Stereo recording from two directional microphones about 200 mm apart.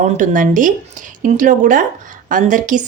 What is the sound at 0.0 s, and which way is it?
Speech, 40° right (ahead or behind).